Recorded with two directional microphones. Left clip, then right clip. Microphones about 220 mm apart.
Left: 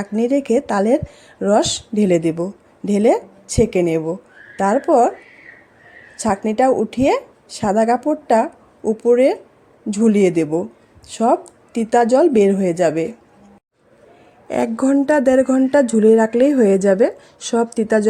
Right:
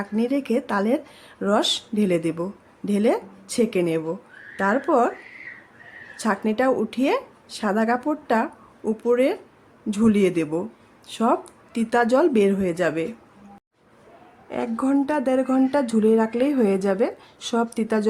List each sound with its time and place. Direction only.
0.0 s speech: 15° left (ahead or behind)
6.1 s speech: 15° left (ahead or behind)
14.5 s speech: 20° left (ahead or behind)